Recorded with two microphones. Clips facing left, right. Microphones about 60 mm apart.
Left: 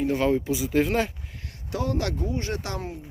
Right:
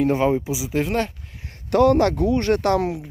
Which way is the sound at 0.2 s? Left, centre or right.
Centre.